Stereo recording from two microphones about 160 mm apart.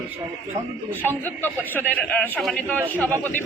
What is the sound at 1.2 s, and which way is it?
A man's voice, 10° left (ahead or behind).